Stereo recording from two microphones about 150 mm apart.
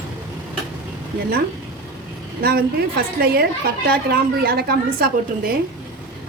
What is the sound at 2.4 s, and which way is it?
A woman's voice, 90° right.